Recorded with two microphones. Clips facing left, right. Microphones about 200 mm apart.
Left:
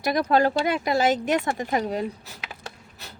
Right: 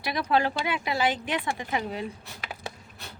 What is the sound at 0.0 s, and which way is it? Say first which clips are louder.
Speech: left 5 dB; 45° left (ahead or behind).